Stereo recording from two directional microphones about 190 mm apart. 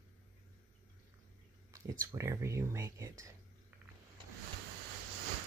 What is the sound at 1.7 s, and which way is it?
Speech, 15° right (ahead or behind).